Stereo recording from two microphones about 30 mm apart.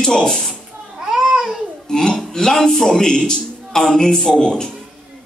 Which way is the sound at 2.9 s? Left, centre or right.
Left.